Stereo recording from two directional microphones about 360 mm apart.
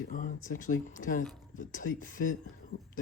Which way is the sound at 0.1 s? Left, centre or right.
Left.